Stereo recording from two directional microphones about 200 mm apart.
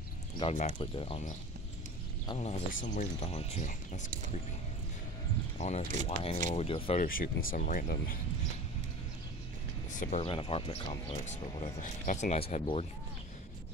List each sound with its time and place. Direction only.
0.4 s speech: 35° left (ahead or behind)
2.3 s speech: 35° left (ahead or behind)
5.6 s speech: 35° left (ahead or behind)
7.1 s speech: 45° left (ahead or behind)
9.9 s speech: 35° left (ahead or behind)